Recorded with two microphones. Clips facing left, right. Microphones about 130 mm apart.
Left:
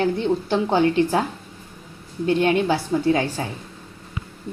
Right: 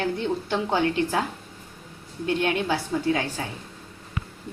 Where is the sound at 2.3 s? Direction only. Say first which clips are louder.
Left 5 dB; 35° left (ahead or behind).